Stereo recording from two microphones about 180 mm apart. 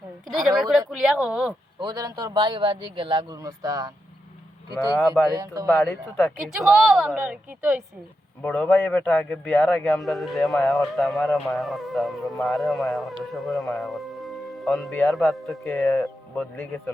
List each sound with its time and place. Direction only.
0.3 s a man's voice: centre (ahead or behind)
1.8 s a man's voice: 20° right (ahead or behind)
5.3 s a man's voice: 20° right (ahead or behind)
5.7 s speech: 10° left (ahead or behind)
6.1 s a man's voice: centre (ahead or behind)
8.4 s a man's voice: 10° left (ahead or behind)
15.6 s speech: 15° left (ahead or behind)